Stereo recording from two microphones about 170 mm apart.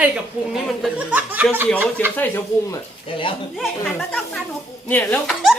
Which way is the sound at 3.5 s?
Centre (ahead or behind).